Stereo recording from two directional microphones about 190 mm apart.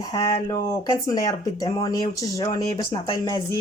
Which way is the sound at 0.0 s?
20° left (ahead or behind).